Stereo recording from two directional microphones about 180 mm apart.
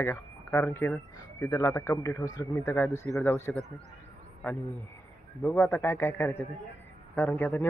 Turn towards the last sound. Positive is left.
turn(degrees=10)  # may be behind; listen again after turning